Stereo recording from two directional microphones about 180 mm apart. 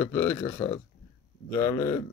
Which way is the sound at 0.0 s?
15° left (ahead or behind).